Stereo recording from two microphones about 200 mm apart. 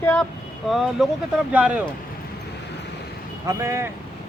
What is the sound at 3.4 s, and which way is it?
Speech, 15° right (ahead or behind).